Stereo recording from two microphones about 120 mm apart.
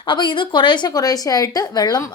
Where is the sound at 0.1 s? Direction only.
40° left (ahead or behind).